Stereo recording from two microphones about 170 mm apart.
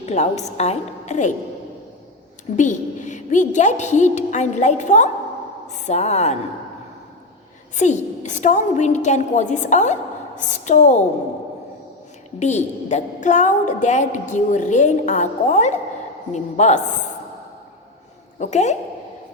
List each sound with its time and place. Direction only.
0.0 s a woman's voice: 40° left (ahead or behind)
2.6 s a woman's voice: 45° left (ahead or behind)
7.8 s a woman's voice: 45° left (ahead or behind)
12.4 s a woman's voice: 45° left (ahead or behind)
18.3 s a woman's voice: 40° left (ahead or behind)